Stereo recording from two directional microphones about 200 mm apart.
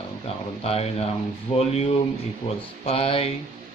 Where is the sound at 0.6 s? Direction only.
30° left (ahead or behind).